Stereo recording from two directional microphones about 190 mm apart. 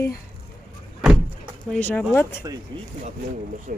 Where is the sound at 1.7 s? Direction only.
10° left (ahead or behind).